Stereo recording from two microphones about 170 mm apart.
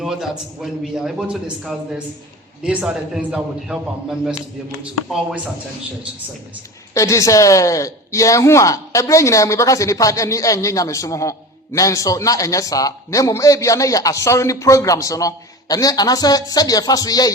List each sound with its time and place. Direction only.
0.0 s a man's voice: 5° right (ahead or behind)
6.9 s a man's voice: 20° left (ahead or behind)